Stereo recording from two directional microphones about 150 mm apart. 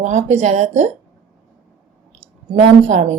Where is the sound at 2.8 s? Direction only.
55° right (ahead or behind).